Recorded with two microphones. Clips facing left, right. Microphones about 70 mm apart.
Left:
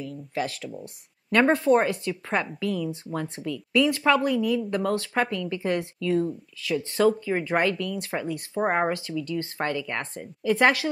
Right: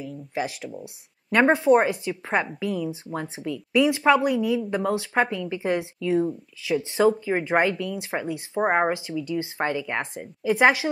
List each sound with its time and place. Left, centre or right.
0.0 s speech: centre